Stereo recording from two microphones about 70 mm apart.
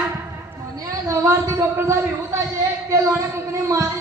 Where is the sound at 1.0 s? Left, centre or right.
Right.